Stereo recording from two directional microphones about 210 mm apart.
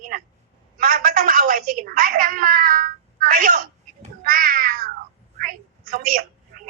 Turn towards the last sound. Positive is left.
turn(degrees=-40)  # may be behind; listen again after turning